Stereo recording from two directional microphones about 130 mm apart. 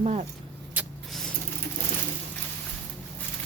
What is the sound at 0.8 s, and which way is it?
Vehicle, 10° right (ahead or behind).